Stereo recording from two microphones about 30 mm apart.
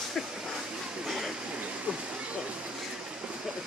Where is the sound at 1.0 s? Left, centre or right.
Centre.